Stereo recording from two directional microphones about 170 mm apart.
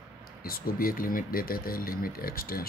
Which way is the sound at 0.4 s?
60° left (ahead or behind).